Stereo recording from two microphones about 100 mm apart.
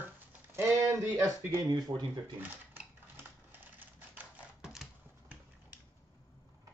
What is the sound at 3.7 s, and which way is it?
Typewriter, 15° right (ahead or behind).